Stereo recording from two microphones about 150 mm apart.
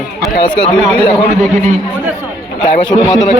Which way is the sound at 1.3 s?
55° right (ahead or behind).